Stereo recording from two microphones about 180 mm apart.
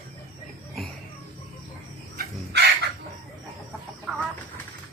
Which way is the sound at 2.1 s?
60° right (ahead or behind).